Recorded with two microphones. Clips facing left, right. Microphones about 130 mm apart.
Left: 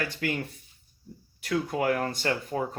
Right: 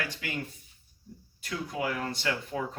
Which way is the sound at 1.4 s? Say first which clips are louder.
Left 6 dB; 55° left (ahead or behind).